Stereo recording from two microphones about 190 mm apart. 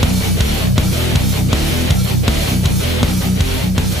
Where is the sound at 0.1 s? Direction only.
Centre (ahead or behind).